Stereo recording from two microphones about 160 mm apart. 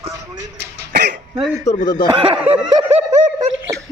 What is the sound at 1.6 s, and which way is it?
Speech, 50° left (ahead or behind).